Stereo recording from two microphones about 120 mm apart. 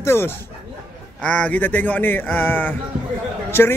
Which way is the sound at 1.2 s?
10° left (ahead or behind).